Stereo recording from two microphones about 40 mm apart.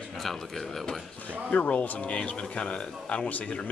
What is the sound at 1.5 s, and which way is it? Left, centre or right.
Speech, left.